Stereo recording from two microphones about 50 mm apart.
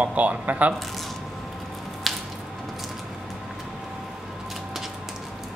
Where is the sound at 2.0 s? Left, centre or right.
Centre.